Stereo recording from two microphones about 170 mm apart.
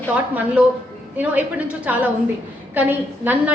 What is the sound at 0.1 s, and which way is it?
A woman's voice, 10° right (ahead or behind).